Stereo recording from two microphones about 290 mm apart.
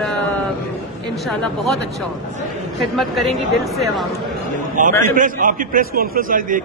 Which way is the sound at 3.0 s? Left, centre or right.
Centre.